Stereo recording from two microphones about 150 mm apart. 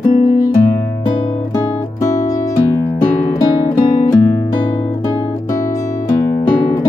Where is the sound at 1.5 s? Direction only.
20° left (ahead or behind).